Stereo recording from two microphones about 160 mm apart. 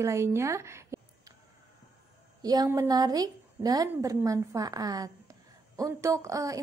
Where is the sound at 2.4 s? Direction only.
20° right (ahead or behind).